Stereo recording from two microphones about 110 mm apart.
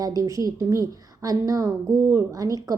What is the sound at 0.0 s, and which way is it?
A woman's voice, 30° right (ahead or behind).